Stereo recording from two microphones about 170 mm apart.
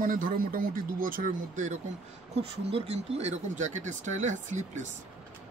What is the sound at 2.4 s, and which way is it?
Speech, 35° right (ahead or behind).